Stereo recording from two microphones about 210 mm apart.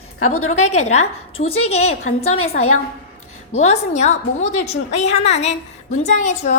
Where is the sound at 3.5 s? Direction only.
35° left (ahead or behind).